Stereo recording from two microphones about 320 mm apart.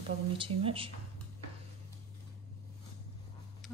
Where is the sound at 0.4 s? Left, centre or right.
Centre.